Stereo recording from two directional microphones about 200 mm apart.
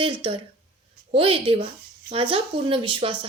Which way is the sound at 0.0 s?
25° right (ahead or behind).